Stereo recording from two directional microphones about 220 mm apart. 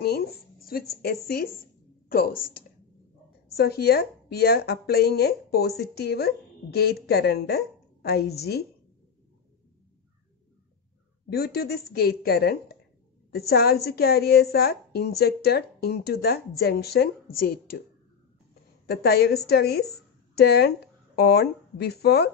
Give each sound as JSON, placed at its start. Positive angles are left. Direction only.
{"t": 0.0, "sound": "a woman's voice", "side_deg": 45}
{"t": 3.5, "sound": "a woman's voice", "side_deg": 45}
{"t": 11.2, "sound": "a woman's voice", "side_deg": 45}
{"t": 18.9, "sound": "a woman's voice", "side_deg": 45}